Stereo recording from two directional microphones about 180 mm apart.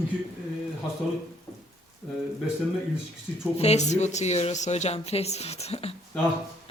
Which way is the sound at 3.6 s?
40° left (ahead or behind).